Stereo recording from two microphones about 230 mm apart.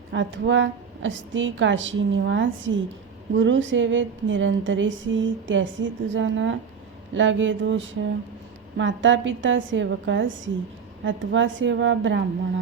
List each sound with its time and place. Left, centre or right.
0.1 s a woman's voice: right